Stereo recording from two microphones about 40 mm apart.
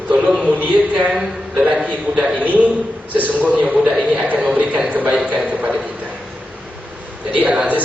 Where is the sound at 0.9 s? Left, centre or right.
Right.